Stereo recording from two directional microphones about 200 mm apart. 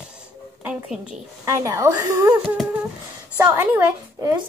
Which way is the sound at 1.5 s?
15° right (ahead or behind).